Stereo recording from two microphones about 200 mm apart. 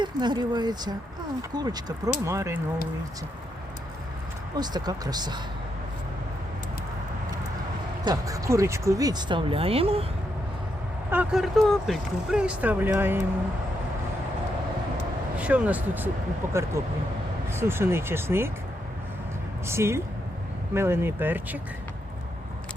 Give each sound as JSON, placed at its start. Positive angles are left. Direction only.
{"t": 0.0, "sound": "speech", "side_deg": -20}
{"t": 4.5, "sound": "speech", "side_deg": -20}
{"t": 8.0, "sound": "speech", "side_deg": -15}
{"t": 11.1, "sound": "speech", "side_deg": -5}
{"t": 15.4, "sound": "speech", "side_deg": -5}
{"t": 19.6, "sound": "speech", "side_deg": -15}